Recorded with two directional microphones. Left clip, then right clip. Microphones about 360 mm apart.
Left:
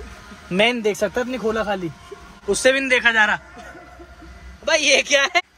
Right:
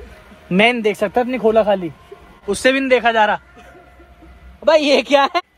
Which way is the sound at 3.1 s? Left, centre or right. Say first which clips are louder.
Right 2 dB; centre.